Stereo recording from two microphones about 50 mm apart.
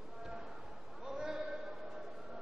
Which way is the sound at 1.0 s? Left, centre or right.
Centre.